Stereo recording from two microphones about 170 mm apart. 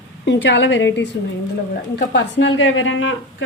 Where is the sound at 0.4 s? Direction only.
90° left.